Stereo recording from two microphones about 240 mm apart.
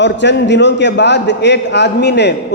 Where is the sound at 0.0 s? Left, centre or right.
Left.